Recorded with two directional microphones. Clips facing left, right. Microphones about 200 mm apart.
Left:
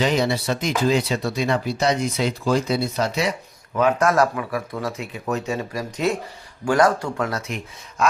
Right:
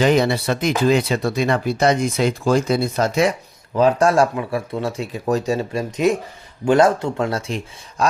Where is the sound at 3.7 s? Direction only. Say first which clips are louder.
Right 3 dB; 30° right (ahead or behind).